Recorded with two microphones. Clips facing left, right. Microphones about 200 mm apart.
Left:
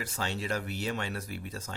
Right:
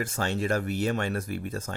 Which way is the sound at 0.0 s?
50° right (ahead or behind).